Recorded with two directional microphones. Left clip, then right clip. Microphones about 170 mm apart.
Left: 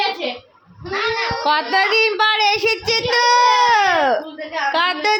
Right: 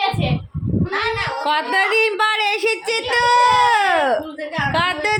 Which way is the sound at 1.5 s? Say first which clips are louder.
Left 1 dB; 5° left (ahead or behind).